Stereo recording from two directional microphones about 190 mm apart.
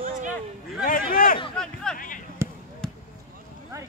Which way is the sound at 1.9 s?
45° left (ahead or behind).